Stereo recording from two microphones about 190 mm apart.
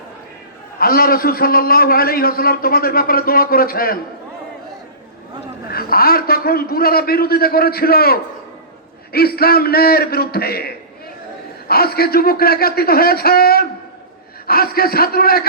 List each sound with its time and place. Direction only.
0.8 s a man's voice: 50° left (ahead or behind)
5.7 s a man's voice: 50° left (ahead or behind)